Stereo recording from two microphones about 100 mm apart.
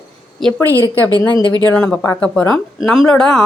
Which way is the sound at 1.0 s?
40° right (ahead or behind).